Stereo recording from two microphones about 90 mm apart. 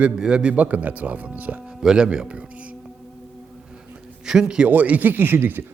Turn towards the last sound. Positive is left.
turn(degrees=-25)  # may be behind; listen again after turning